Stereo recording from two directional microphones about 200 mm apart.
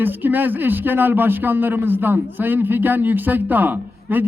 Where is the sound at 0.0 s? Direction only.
10° right (ahead or behind).